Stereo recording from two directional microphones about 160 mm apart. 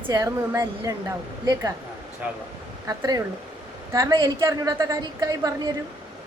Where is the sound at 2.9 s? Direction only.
20° right (ahead or behind).